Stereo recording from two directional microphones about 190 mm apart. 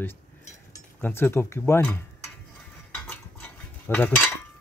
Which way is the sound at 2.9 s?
10° left (ahead or behind).